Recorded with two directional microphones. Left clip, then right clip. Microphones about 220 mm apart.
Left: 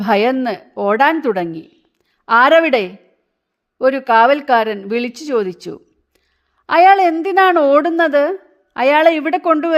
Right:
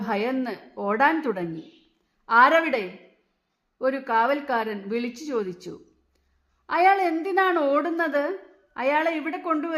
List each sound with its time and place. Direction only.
0.0 s a woman's voice: 35° left (ahead or behind)